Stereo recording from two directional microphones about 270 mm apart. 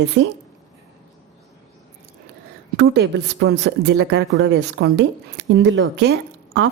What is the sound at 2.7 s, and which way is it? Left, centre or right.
A woman's voice, right.